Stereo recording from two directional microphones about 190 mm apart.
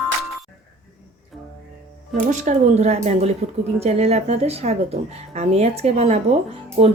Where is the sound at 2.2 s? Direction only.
40° right (ahead or behind).